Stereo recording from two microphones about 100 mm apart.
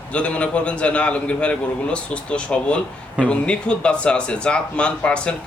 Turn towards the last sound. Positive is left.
turn(degrees=10)  # may be behind; listen again after turning